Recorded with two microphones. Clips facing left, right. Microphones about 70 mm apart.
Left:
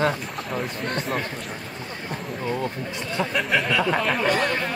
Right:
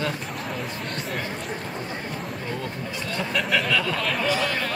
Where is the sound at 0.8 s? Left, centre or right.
Left.